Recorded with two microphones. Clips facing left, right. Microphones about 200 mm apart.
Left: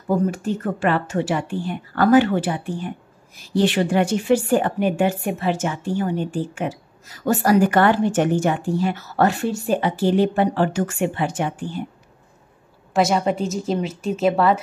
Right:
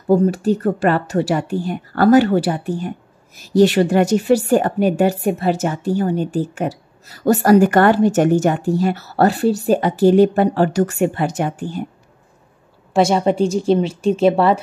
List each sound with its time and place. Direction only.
0.1 s a woman's voice: 35° right (ahead or behind)
12.9 s a woman's voice: 30° right (ahead or behind)